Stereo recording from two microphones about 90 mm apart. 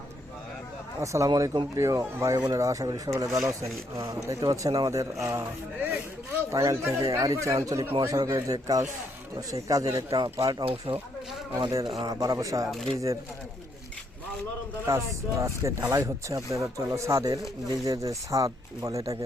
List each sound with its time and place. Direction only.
1.0 s speech: 35° right (ahead or behind)
1.3 s speech: 45° right (ahead or behind)
5.8 s speech: 20° right (ahead or behind)
6.5 s speech: 35° right (ahead or behind)
10.7 s speech: 75° right (ahead or behind)
12.0 s speech: 40° right (ahead or behind)
14.8 s speech: 35° right (ahead or behind)